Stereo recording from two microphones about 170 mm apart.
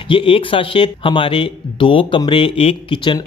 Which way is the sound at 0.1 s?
30° left (ahead or behind).